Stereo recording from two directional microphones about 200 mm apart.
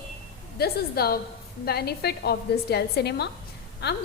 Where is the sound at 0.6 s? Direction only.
50° left (ahead or behind).